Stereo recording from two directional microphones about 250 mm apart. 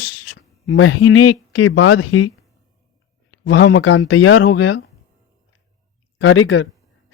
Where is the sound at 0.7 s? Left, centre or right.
Left.